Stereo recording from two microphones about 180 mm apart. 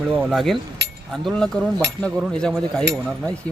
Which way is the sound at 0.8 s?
70° right (ahead or behind).